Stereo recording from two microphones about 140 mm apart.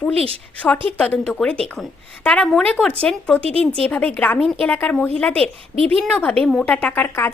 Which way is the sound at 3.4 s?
45° right (ahead or behind).